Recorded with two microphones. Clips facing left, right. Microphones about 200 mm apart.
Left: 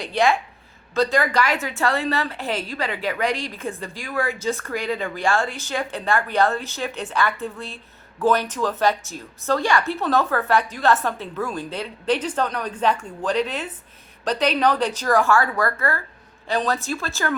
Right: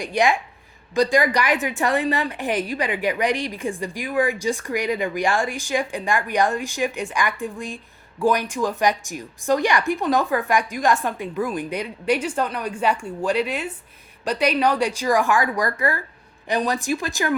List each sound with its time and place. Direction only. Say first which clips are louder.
0.0 s a woman's voice: even; 15° right (ahead or behind)